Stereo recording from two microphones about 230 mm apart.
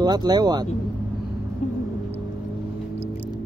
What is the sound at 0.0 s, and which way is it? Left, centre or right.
Speech, centre.